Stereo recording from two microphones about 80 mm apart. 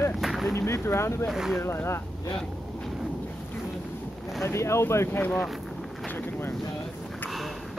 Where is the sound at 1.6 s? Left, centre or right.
Left.